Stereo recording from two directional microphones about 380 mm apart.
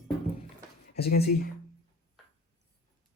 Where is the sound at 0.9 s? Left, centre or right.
Left.